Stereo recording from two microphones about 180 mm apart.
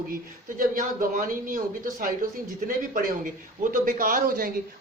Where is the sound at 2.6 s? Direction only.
50° right (ahead or behind).